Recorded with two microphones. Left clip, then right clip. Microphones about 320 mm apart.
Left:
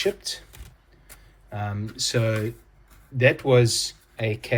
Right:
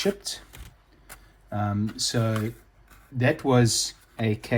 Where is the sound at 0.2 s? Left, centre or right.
Centre.